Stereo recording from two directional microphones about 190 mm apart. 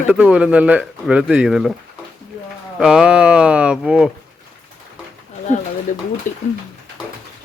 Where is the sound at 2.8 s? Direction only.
5° right (ahead or behind).